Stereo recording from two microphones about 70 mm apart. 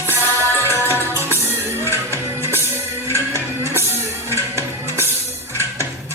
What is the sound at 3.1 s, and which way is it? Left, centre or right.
Music, right.